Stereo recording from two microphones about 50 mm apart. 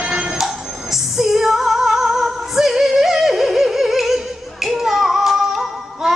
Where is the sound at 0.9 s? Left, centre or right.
Centre.